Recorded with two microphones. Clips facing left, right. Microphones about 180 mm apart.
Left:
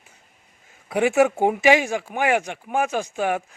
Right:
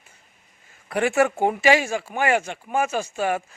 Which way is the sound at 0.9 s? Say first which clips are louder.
Left 2 dB; 15° left (ahead or behind).